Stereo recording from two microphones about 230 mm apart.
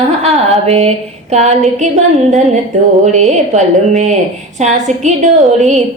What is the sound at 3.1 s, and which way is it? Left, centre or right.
Speech, right.